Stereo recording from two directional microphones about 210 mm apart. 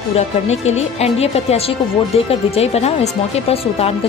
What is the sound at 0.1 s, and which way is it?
A woman's voice, 30° left (ahead or behind).